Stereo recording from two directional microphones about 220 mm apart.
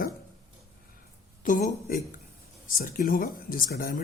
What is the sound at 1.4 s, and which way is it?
Speech, 35° left (ahead or behind).